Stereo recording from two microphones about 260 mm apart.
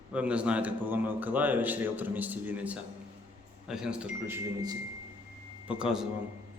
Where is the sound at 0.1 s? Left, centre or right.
Centre.